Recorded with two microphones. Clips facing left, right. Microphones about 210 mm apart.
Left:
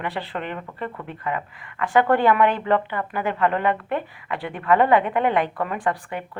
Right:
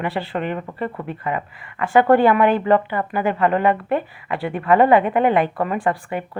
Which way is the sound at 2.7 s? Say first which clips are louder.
Right 4 dB; 40° right (ahead or behind).